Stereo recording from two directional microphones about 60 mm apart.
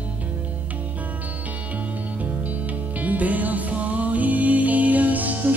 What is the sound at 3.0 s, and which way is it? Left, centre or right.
Music, right.